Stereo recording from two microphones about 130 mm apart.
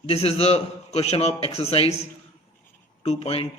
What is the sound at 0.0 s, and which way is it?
A man's voice, 50° left (ahead or behind).